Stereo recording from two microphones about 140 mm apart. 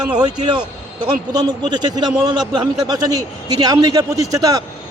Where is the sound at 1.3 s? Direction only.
30° right (ahead or behind).